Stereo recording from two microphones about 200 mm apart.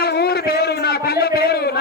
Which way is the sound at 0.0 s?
55° left (ahead or behind).